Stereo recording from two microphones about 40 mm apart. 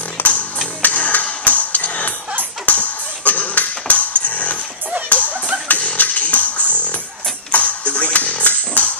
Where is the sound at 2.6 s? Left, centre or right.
Left.